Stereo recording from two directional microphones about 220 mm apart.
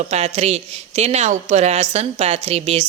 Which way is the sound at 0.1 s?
30° right (ahead or behind).